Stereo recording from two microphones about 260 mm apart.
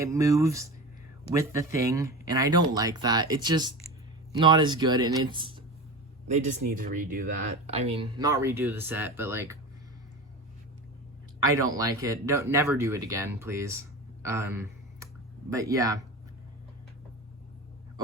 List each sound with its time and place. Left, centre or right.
0.0 s speech: centre
11.4 s speech: centre